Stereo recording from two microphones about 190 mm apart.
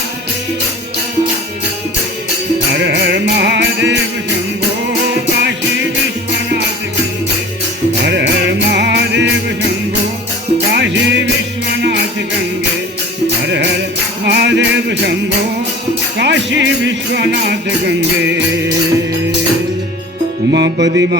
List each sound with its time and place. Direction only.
2.7 s music: 65° right (ahead or behind)
8.0 s music: 65° right (ahead or behind)
10.7 s music: 70° right (ahead or behind)
14.3 s music: 65° right (ahead or behind)
16.1 s speech: 65° right (ahead or behind)
20.5 s music: 65° right (ahead or behind)